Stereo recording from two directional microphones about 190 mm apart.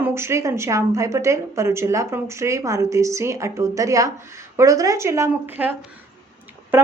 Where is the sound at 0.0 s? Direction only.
15° right (ahead or behind).